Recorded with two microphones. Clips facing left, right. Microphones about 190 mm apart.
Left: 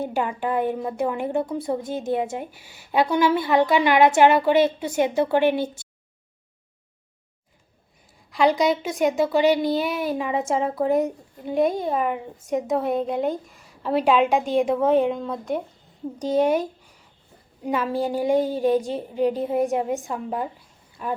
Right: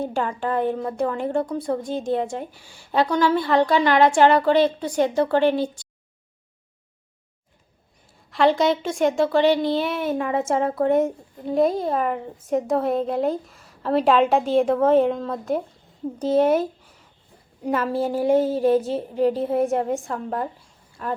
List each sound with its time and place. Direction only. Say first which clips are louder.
0.1 s a woman's voice: even; 10° left (ahead or behind)
2.0 s a woman's voice: right 1 dB; 5° left (ahead or behind)
2.9 s a woman's voice: even; 20° left (ahead or behind)
8.3 s a woman's voice: right 1 dB; centre (ahead or behind)
17.6 s a woman's voice: right 1 dB; centre (ahead or behind)